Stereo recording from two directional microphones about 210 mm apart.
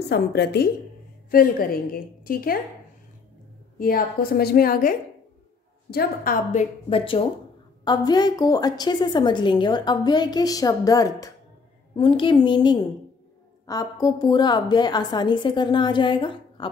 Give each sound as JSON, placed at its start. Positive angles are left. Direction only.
{"t": 0.1, "sound": "a woman's voice", "side_deg": 50}
{"t": 3.7, "sound": "a woman's voice", "side_deg": 45}